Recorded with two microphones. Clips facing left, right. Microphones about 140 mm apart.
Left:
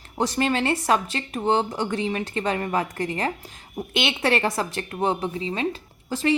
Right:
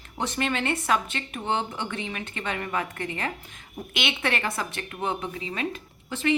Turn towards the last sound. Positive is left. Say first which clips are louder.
# left 3 dB
turn(degrees=35)  # may be behind; listen again after turning